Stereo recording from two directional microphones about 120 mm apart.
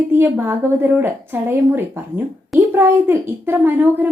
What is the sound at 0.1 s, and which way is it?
Speech, 15° right (ahead or behind).